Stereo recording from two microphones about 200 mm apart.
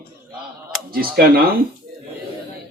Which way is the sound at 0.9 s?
50° right (ahead or behind).